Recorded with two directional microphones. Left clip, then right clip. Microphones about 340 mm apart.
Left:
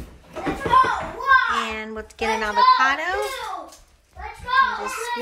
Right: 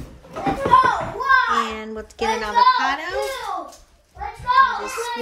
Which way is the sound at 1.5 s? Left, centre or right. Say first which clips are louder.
Right 3 dB; centre.